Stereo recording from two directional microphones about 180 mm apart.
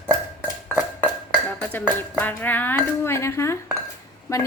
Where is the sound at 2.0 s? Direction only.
10° left (ahead or behind).